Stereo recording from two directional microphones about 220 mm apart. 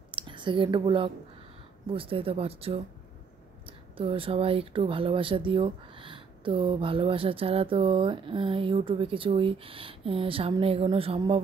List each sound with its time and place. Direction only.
0.1 s speech: 20° right (ahead or behind)
3.9 s speech: 25° right (ahead or behind)